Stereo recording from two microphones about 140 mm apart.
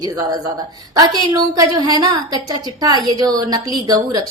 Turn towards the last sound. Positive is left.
turn(degrees=-30)  # may be behind; listen again after turning